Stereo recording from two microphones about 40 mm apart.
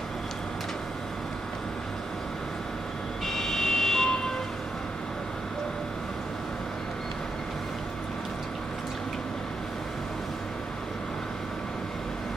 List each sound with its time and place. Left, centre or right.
3.3 s vehicle: centre